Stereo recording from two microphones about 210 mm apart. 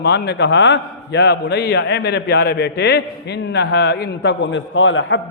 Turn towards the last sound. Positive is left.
turn(degrees=65)  # may be behind; listen again after turning